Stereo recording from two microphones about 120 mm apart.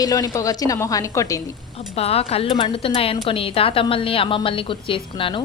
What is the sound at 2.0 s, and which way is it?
Speech, 55° left (ahead or behind).